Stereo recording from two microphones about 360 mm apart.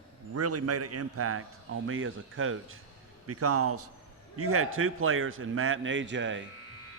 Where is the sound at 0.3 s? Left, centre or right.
Right.